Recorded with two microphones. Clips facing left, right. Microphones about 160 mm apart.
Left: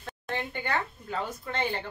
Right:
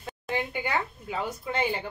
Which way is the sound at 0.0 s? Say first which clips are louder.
Right 3 dB; 10° right (ahead or behind).